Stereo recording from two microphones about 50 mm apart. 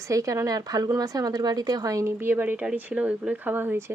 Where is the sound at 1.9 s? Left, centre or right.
Right.